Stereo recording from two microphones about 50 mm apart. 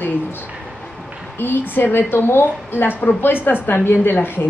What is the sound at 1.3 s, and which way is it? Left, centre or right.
A woman's voice, left.